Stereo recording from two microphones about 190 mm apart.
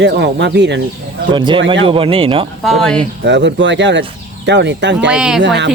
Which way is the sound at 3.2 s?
70° right (ahead or behind).